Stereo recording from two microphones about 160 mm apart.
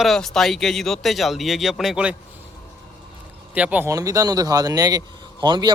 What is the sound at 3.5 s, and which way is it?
Speech, 10° right (ahead or behind).